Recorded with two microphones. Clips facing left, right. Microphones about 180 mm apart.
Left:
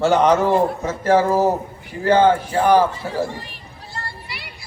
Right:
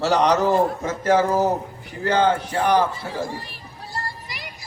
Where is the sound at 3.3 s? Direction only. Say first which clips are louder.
Even; 35° right (ahead or behind).